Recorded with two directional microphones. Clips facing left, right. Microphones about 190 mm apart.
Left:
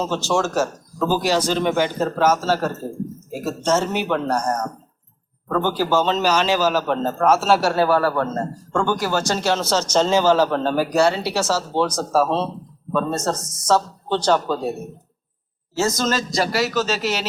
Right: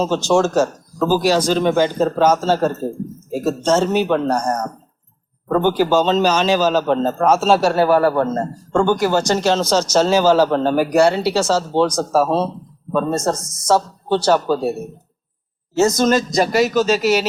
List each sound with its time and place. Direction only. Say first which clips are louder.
0.0 s speech: right 5 dB; 15° right (ahead or behind)
15.8 s speech: right 6 dB; 20° right (ahead or behind)